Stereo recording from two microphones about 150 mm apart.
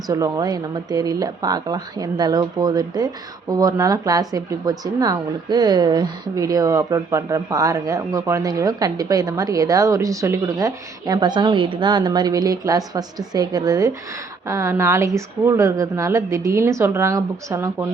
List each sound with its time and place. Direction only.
0.1 s speech: 25° right (ahead or behind)